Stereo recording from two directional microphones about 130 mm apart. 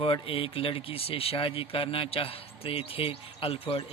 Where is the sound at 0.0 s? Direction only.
45° left (ahead or behind).